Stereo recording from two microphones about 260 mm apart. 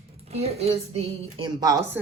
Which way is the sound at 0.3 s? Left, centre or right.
Right.